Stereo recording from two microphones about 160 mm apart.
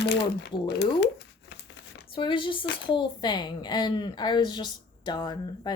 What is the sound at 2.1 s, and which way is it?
Speech, 30° left (ahead or behind).